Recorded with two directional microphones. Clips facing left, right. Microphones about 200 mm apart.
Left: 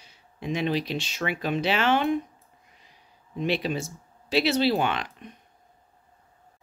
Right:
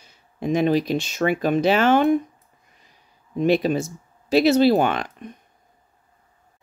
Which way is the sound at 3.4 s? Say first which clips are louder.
Right 8 dB; 45° right (ahead or behind).